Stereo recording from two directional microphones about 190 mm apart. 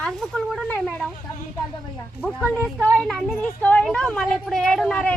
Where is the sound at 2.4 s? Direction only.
5° right (ahead or behind).